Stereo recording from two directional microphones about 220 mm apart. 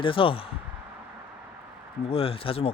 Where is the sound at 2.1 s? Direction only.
25° left (ahead or behind).